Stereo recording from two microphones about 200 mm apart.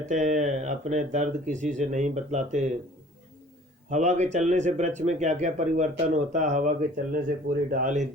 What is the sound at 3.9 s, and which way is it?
Speech, 35° right (ahead or behind).